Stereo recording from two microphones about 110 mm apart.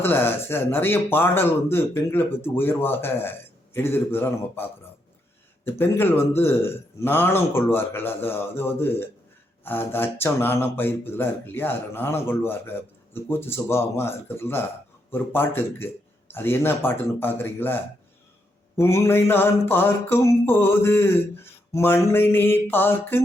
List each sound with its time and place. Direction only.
0.0 s a man's voice: 20° left (ahead or behind)
5.6 s a man's voice: 20° left (ahead or behind)